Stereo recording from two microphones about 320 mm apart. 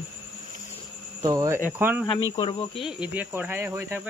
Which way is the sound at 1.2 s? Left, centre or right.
Centre.